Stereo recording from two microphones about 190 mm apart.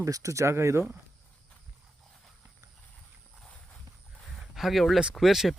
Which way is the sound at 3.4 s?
Centre (ahead or behind).